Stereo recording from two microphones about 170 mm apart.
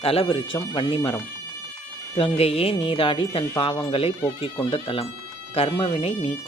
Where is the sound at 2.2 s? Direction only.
35° left (ahead or behind).